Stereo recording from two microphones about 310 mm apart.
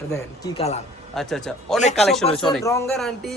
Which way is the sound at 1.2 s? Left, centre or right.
Centre.